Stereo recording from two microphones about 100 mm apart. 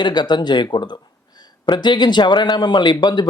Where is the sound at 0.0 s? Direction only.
45° left (ahead or behind).